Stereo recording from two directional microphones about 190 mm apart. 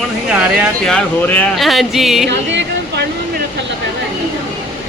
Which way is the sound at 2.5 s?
70° right (ahead or behind).